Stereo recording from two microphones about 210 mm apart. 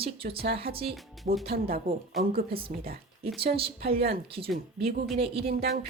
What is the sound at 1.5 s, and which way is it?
Speech, 45° right (ahead or behind).